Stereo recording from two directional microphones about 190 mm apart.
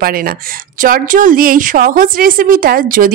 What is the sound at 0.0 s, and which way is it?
A woman's voice, 50° right (ahead or behind).